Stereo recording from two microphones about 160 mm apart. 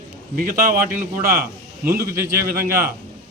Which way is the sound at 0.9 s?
60° right (ahead or behind).